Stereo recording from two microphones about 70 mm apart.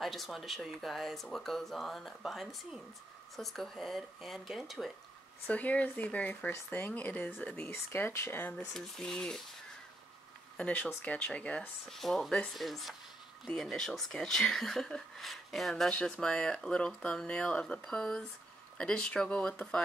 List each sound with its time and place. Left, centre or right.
0.0 s speech: centre
5.5 s speech: left
8.4 s speech: left
8.7 s speech: centre
10.6 s speech: left
11.9 s speech: centre